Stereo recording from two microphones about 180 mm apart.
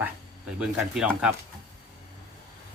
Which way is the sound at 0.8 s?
5° right (ahead or behind).